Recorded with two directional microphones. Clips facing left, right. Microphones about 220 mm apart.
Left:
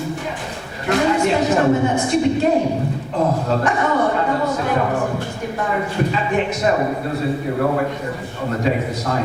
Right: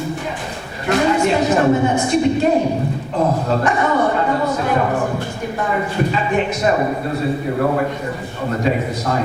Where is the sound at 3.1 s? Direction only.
25° right (ahead or behind).